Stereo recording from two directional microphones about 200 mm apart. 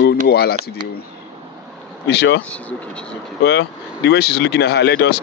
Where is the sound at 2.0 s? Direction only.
60° left (ahead or behind).